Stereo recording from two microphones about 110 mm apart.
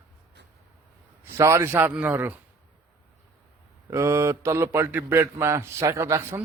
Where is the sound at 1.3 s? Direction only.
25° right (ahead or behind).